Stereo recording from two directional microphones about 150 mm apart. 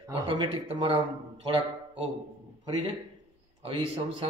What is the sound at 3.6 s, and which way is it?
Speech, 35° right (ahead or behind).